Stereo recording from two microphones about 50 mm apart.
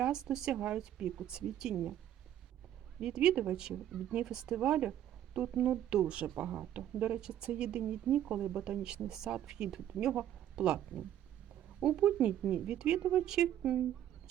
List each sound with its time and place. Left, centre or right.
0.0 s speech: centre
3.0 s speech: centre